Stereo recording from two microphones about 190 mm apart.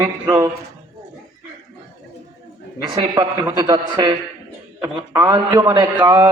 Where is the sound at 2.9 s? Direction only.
25° right (ahead or behind).